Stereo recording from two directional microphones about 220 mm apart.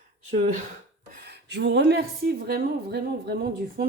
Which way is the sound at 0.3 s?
35° right (ahead or behind).